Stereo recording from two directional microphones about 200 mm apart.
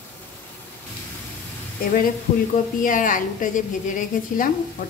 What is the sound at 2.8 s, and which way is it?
A woman's voice, 40° left (ahead or behind).